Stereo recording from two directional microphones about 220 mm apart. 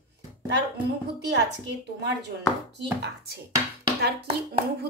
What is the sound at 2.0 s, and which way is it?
Speech, 50° right (ahead or behind).